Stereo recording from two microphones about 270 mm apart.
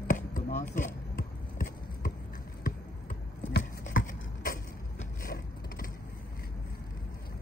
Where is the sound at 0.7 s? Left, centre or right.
Left.